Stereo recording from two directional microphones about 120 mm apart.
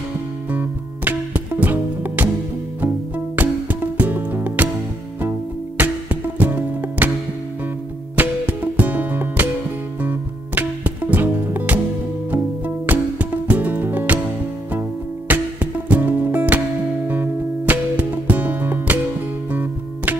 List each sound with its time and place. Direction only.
0.5 s music: 15° right (ahead or behind)
3.3 s music: 15° right (ahead or behind)
5.8 s music: 15° right (ahead or behind)
8.2 s music: 15° right (ahead or behind)